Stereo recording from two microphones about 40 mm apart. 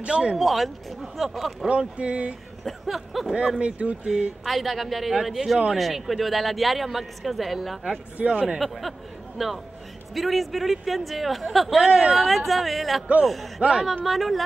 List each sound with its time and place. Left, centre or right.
0.0 s speech: right
0.4 s a man's voice: centre
1.7 s speech: right
2.6 s a man's voice: centre
3.5 s speech: right
4.5 s a man's voice: centre
5.8 s a man's voice: centre
8.2 s speech: right
8.5 s a man's voice: centre
11.9 s speech: right
12.2 s a man's voice: centre
13.6 s speech: right
14.0 s a man's voice: centre